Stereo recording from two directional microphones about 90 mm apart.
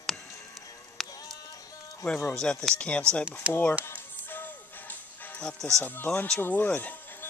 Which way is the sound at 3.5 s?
15° right (ahead or behind).